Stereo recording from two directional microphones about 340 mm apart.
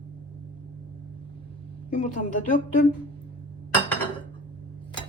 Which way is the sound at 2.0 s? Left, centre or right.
Left.